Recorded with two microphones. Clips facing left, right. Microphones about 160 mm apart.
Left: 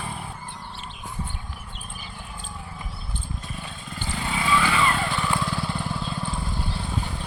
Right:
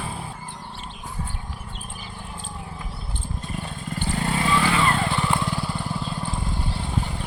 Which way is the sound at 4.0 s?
50° right (ahead or behind).